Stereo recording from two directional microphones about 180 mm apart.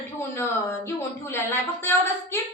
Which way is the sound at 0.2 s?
15° left (ahead or behind).